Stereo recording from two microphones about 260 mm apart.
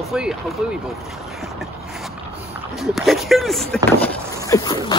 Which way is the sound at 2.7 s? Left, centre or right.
Centre.